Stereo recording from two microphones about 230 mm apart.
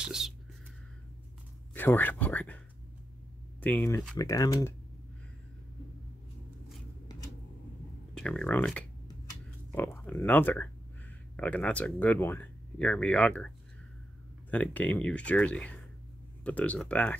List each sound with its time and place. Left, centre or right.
0.0 s speech: centre
1.7 s speech: centre
3.6 s speech: centre
8.1 s speech: centre
14.5 s speech: centre